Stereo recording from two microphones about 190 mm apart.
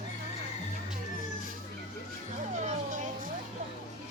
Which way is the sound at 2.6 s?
40° right (ahead or behind).